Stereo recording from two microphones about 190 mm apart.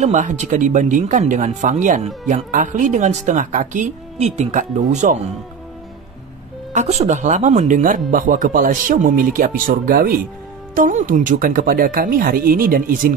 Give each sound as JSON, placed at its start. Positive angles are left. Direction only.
{"t": 0.0, "sound": "speech", "side_deg": -40}
{"t": 6.7, "sound": "speech", "side_deg": -35}